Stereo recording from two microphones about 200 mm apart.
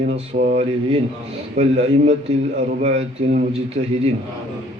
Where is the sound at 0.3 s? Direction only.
40° right (ahead or behind).